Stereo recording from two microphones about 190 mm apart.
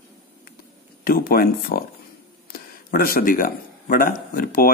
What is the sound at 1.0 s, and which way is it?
Speech, 50° left (ahead or behind).